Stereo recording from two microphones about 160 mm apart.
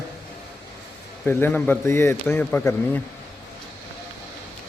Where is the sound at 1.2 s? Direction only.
15° left (ahead or behind).